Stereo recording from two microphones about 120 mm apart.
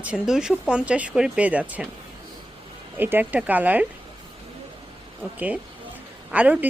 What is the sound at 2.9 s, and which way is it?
Speech, 15° right (ahead or behind).